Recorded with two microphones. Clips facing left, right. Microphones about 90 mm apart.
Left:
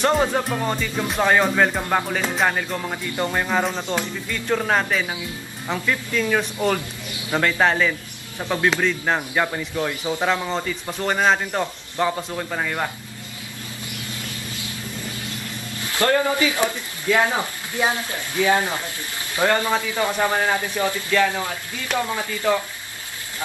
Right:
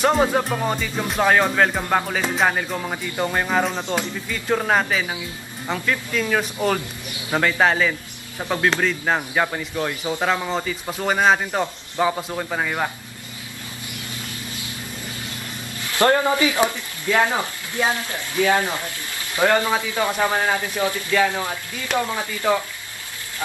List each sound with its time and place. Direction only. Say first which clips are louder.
0.0 s music: right 1 dB; 5° right (ahead or behind)
3.7 s a man's voice: right 1 dB; 15° right (ahead or behind)
4.3 s music: right 1 dB; 5° right (ahead or behind)
6.2 s a man's voice: even; 5° right (ahead or behind)
7.3 s music: right 1 dB; 5° right (ahead or behind)
10.2 s a man's voice: right 1 dB; 5° right (ahead or behind)
16.0 s speech: right 2 dB; 20° right (ahead or behind)
18.4 s speech: even; 20° left (ahead or behind)
19.3 s a man's voice: right 1 dB; 15° right (ahead or behind)